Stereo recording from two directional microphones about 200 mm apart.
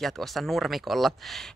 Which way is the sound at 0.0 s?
Centre (ahead or behind).